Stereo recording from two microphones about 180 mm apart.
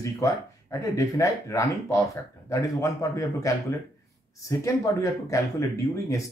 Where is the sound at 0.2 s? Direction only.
15° left (ahead or behind).